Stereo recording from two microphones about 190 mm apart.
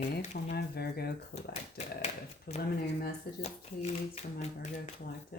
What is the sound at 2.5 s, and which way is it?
Speech, 55° left (ahead or behind).